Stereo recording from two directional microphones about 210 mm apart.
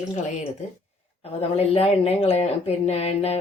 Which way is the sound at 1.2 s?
25° left (ahead or behind).